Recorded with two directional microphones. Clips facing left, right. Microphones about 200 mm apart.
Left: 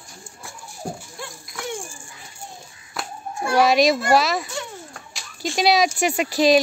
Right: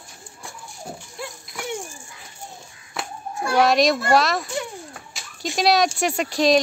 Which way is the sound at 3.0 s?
5° right (ahead or behind).